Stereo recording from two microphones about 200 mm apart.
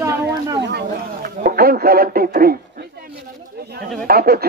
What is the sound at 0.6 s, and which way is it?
Speech, 55° right (ahead or behind).